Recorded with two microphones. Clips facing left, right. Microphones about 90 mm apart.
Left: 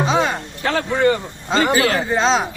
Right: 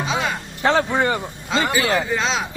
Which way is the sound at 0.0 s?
35° left (ahead or behind).